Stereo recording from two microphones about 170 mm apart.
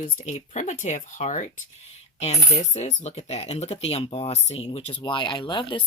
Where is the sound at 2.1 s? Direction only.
40° left (ahead or behind).